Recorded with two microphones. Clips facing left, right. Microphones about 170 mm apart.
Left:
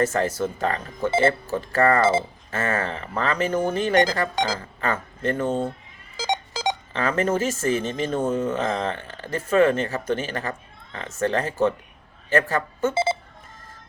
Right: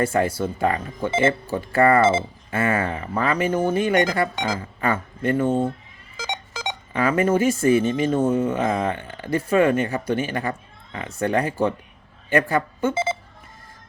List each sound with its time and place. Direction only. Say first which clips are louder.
0.0 s speech: right 1 dB; 10° right (ahead or behind)
2.0 s speech: right 2 dB; 35° left (ahead or behind)
2.5 s speech: right 4 dB; 10° right (ahead or behind)
3.9 s speech: even; 35° left (ahead or behind)
4.8 s speech: right 2 dB; 10° right (ahead or behind)
6.1 s telephone dialing: left 5 dB; 35° left (ahead or behind)
6.9 s a woman's voice: right 5 dB; 10° right (ahead or behind)
12.9 s speech: left 2 dB; 30° left (ahead or behind)